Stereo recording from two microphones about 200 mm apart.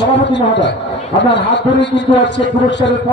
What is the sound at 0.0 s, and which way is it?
A man's voice, 60° left (ahead or behind).